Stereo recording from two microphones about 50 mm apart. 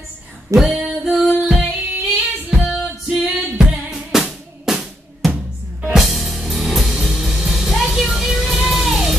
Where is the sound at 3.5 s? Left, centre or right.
Centre.